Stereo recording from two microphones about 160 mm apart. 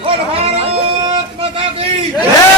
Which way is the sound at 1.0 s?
35° right (ahead or behind).